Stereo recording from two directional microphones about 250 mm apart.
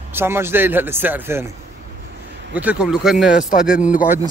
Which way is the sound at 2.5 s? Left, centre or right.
Centre.